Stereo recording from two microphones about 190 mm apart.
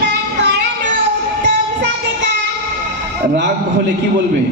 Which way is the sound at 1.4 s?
65° right (ahead or behind).